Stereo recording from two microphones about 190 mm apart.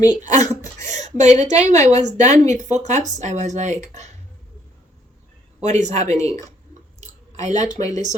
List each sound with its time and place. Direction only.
0.1 s a woman's voice: 40° right (ahead or behind)
5.6 s speech: 35° right (ahead or behind)
7.3 s speech: 40° right (ahead or behind)
7.6 s speech: 20° left (ahead or behind)